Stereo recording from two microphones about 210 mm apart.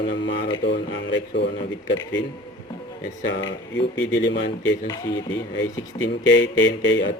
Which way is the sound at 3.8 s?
60° left (ahead or behind).